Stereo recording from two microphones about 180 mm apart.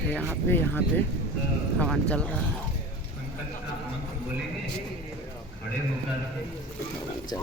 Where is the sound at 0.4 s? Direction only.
10° left (ahead or behind).